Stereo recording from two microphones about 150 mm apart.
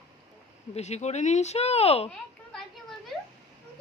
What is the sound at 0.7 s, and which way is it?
Speech, 45° left (ahead or behind).